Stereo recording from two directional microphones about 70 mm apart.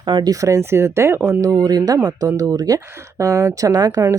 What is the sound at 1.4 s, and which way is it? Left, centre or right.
Speech, right.